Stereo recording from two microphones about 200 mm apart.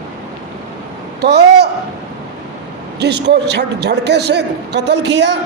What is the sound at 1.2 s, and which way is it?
Speech, 55° right (ahead or behind).